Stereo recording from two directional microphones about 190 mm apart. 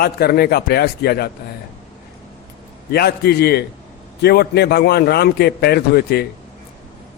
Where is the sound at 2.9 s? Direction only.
55° left (ahead or behind).